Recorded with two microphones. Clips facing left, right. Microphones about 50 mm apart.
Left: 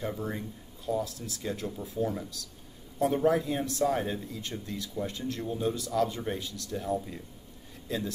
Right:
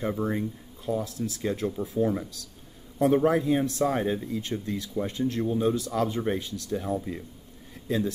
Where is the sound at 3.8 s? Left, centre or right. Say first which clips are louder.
Right 3 dB; right.